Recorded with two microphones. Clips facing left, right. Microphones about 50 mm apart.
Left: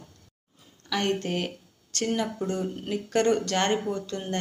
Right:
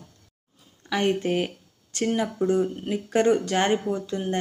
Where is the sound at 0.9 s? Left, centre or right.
Centre.